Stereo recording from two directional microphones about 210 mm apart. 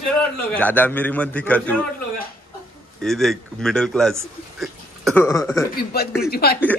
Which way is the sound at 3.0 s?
Centre (ahead or behind).